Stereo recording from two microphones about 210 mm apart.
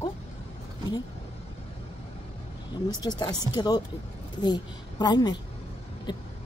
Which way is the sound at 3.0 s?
20° left (ahead or behind).